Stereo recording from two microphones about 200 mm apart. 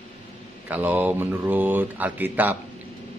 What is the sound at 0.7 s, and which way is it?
Speech, 10° right (ahead or behind).